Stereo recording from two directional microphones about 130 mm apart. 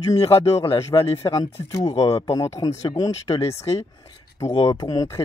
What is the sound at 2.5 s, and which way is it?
Speech, 25° left (ahead or behind).